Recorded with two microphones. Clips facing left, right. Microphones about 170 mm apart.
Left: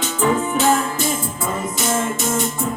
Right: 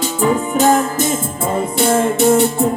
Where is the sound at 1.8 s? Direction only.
60° right (ahead or behind).